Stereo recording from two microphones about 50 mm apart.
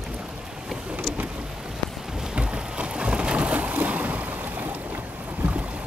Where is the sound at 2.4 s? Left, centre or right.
Right.